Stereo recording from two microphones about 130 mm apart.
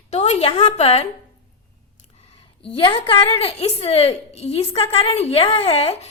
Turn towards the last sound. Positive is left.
turn(degrees=50)  # may be behind; listen again after turning